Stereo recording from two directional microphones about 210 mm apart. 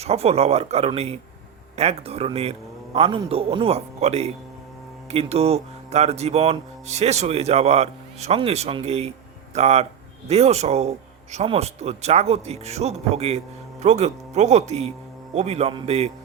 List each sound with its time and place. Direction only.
0.0 s a man's voice: 30° right (ahead or behind)
5.1 s music: 30° right (ahead or behind)